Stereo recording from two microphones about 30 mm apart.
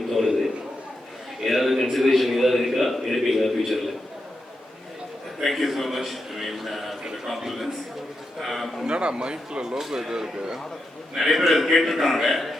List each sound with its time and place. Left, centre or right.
1.5 s a sound: centre
5.4 s a man's voice: centre
8.9 s speech: right
11.2 s a man's voice: centre